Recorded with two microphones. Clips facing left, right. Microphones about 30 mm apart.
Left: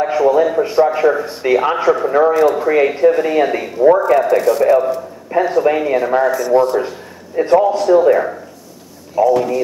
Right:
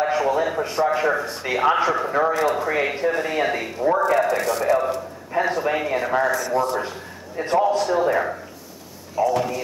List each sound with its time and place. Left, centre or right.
0.0 s a man's voice: centre
1.2 s speech: centre
1.5 s speech: centre
2.0 s speech: centre
2.3 s a man's voice: centre